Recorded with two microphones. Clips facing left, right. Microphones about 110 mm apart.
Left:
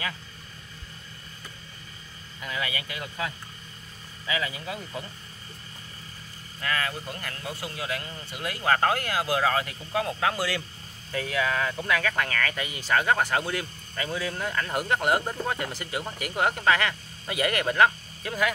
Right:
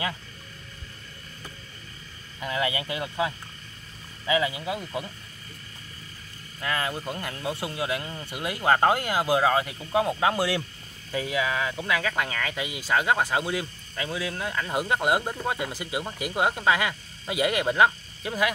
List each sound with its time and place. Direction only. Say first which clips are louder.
2.4 s speech: right 5 dB; 25° right (ahead or behind)
6.6 s speech: right 1 dB; 20° right (ahead or behind)
14.8 s speech: right 1 dB; 15° right (ahead or behind)